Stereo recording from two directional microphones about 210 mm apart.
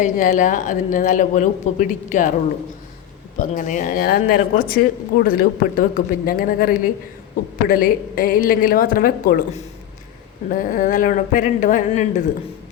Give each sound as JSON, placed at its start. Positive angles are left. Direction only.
{"t": 0.0, "sound": "a woman's voice", "side_deg": 40}
{"t": 3.3, "sound": "a woman's voice", "side_deg": 35}